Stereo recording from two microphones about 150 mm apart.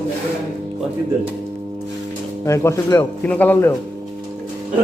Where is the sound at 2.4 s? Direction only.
20° left (ahead or behind).